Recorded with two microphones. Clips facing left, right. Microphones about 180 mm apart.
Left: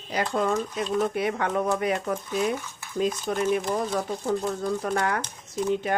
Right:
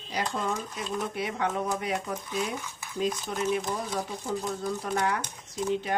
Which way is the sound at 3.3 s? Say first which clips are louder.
Left 4 dB; 50° left (ahead or behind).